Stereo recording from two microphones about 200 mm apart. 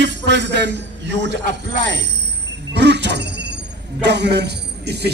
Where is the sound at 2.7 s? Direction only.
60° right (ahead or behind).